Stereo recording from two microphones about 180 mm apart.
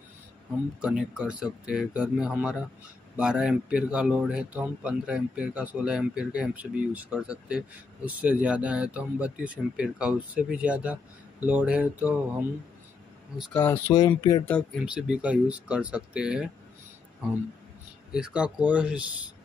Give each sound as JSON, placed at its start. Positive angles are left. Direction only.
{"t": 0.7, "sound": "speech", "side_deg": -5}
{"t": 13.4, "sound": "speech", "side_deg": 10}
{"t": 14.4, "sound": "speech", "side_deg": 10}
{"t": 14.9, "sound": "speech", "side_deg": -5}
{"t": 18.1, "sound": "speech", "side_deg": -5}